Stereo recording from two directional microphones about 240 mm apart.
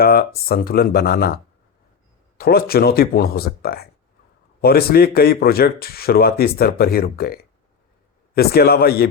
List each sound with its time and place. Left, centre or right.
0.0 s speech: left
2.4 s speech: left
8.4 s speech: left